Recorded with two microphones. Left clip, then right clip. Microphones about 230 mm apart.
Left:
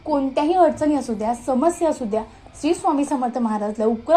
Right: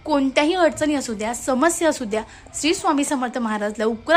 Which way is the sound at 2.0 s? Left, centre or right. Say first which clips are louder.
Left 1 dB; right.